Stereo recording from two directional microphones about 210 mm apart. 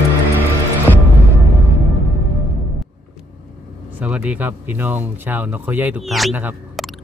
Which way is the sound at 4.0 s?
5° right (ahead or behind).